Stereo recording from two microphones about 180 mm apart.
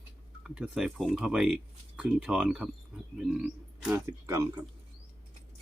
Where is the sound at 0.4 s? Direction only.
5° right (ahead or behind).